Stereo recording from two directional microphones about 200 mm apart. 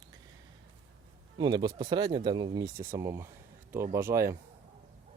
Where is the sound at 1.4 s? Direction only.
20° right (ahead or behind).